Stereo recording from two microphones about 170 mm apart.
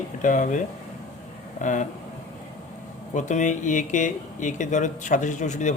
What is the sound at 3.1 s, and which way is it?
Speech, 45° left (ahead or behind).